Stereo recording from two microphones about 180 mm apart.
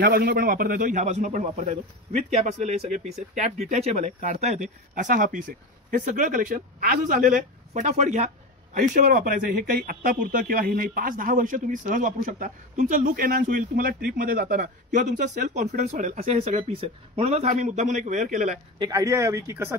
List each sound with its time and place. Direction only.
0.0 s a man's voice: 55° right (ahead or behind)
18.8 s speech: 20° right (ahead or behind)